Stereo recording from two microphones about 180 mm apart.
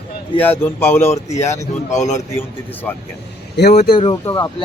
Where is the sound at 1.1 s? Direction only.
40° left (ahead or behind).